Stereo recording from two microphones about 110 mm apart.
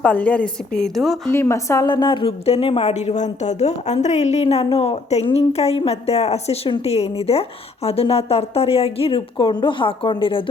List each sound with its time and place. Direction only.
0.0 s a woman's voice: 10° left (ahead or behind)
1.3 s a woman's voice: 25° left (ahead or behind)
1.9 s speech: 45° left (ahead or behind)